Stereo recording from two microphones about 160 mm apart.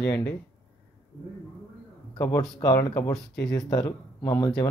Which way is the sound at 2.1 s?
20° left (ahead or behind).